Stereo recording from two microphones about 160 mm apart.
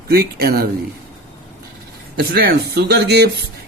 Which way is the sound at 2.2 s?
85° right.